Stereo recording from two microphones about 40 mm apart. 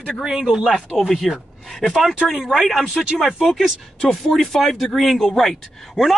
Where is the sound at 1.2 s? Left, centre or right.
Centre.